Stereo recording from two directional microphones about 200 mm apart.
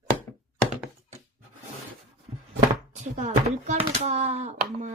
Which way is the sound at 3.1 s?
35° right (ahead or behind).